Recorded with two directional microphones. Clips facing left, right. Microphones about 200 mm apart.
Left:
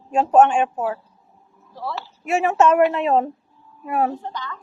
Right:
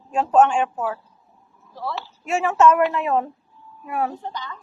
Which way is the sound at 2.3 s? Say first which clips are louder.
Left 1 dB; 20° left (ahead or behind).